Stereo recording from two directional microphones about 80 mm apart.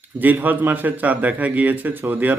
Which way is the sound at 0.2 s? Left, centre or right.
Right.